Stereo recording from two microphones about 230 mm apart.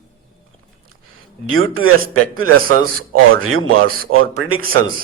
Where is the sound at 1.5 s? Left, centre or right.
Right.